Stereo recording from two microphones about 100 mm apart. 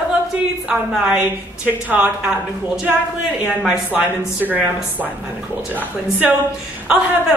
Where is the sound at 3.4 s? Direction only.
15° right (ahead or behind).